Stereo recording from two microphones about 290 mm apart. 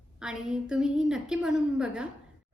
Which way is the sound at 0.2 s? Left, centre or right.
Centre.